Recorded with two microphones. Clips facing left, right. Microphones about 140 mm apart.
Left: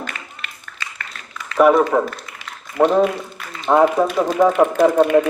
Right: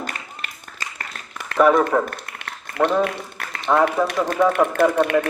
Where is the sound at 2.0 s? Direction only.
60° right (ahead or behind).